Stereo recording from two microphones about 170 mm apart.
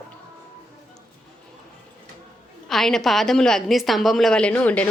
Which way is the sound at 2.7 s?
Centre (ahead or behind).